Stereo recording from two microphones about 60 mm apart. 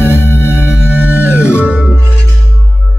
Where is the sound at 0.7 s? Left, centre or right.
Right.